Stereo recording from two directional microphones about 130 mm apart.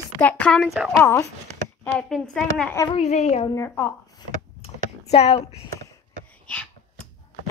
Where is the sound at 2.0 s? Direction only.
5° left (ahead or behind).